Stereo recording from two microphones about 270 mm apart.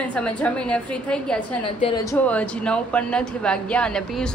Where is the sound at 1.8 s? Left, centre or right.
Centre.